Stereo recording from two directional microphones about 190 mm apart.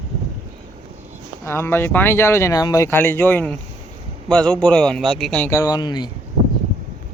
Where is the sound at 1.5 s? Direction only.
10° left (ahead or behind).